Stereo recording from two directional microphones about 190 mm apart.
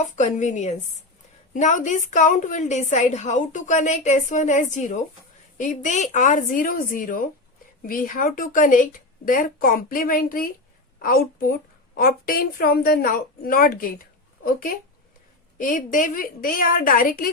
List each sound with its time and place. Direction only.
0.0 s a woman's voice: 40° left (ahead or behind)